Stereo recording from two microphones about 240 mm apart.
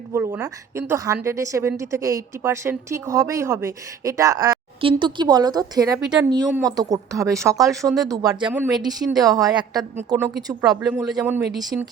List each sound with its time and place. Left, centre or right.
0.1 s a woman's voice: centre
6.0 s a man's voice: centre
6.3 s a woman's voice: centre
11.0 s a man's voice: centre